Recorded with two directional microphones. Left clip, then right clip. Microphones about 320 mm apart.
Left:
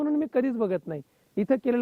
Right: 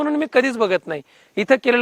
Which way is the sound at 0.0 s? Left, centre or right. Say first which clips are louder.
Right 8 dB; centre.